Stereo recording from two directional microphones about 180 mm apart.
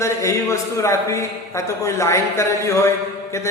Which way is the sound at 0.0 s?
15° left (ahead or behind).